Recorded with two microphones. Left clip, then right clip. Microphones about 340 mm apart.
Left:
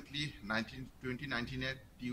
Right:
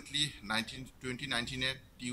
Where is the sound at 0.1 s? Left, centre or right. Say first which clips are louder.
Right 5 dB; centre.